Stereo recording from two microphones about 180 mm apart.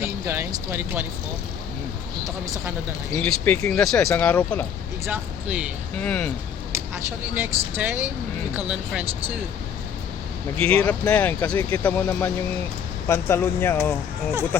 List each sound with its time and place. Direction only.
0.3 s speech: 15° right (ahead or behind)
2.2 s speech: 20° right (ahead or behind)
3.2 s speech: 10° left (ahead or behind)
5.0 s speech: 10° right (ahead or behind)
6.0 s speech: 10° left (ahead or behind)
7.3 s speech: 10° right (ahead or behind)
10.7 s speech: 5° left (ahead or behind)